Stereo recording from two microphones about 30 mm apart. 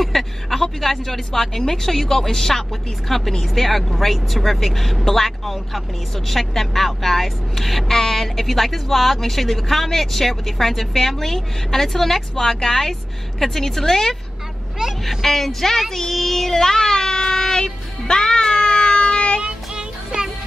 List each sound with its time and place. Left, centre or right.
0.0 s speech: centre
15.0 s child singing: centre; by 19.4 s left
19.4 s music: right